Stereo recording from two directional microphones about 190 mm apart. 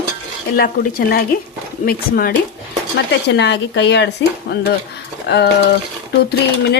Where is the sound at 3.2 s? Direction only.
65° left (ahead or behind).